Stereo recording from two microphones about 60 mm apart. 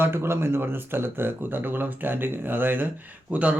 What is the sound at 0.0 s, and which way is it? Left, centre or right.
Speech, right.